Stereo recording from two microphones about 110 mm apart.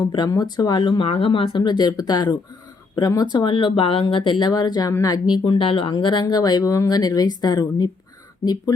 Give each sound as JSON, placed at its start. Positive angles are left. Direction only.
{"t": 0.3, "sound": "speech", "side_deg": 35}
{"t": 1.0, "sound": "speech", "side_deg": 65}
{"t": 5.6, "sound": "speech", "side_deg": 60}
{"t": 5.9, "sound": "speech", "side_deg": 45}